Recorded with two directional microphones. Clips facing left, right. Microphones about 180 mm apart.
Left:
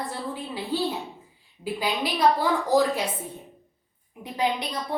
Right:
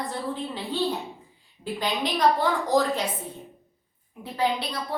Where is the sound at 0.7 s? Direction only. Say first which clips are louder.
Even; 5° left (ahead or behind).